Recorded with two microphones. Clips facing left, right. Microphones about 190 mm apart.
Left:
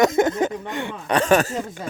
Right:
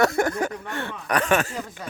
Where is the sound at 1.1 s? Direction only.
30° left (ahead or behind).